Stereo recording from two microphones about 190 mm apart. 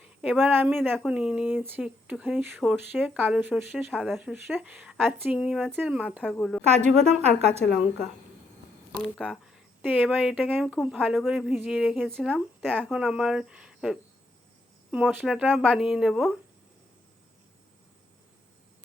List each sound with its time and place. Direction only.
0.0 s speech: 5° right (ahead or behind)
6.7 s a woman's voice: 35° right (ahead or behind)
9.0 s speech: 5° left (ahead or behind)